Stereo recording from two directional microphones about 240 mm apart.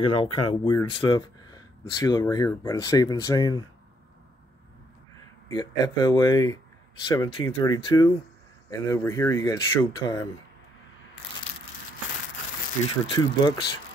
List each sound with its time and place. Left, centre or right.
0.0 s speech: centre
5.5 s speech: centre
13.0 s speech: centre